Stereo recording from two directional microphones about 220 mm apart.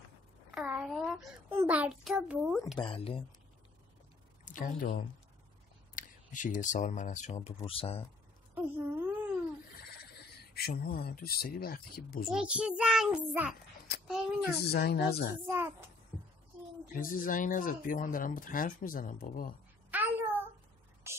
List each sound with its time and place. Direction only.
0.6 s a sound: 5° right (ahead or behind)
1.6 s a child's voice: 5° right (ahead or behind)
2.8 s speech: 25° left (ahead or behind)
4.5 s speech: 35° left (ahead or behind)
8.5 s a sound: 10° right (ahead or behind)
9.8 s speech: 45° left (ahead or behind)
12.3 s a child's voice: 5° right (ahead or behind)
13.9 s a woman's voice: 50° left (ahead or behind)
15.4 s speech: 10° right (ahead or behind)
16.1 s a sound: 10° right (ahead or behind)
16.9 s speech: 40° left (ahead or behind)
19.9 s child singing: 10° right (ahead or behind)
21.0 s speech: 10° right (ahead or behind)